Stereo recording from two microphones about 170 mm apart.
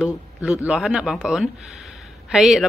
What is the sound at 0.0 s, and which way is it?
Speech, 5° right (ahead or behind).